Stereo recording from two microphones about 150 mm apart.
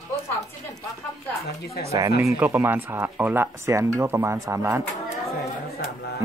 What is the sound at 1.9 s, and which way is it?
Speech, 20° right (ahead or behind).